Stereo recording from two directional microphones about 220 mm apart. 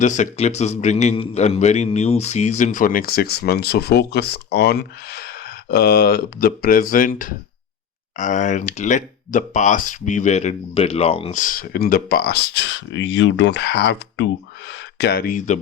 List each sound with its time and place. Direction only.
0.0 s speech: 35° left (ahead or behind)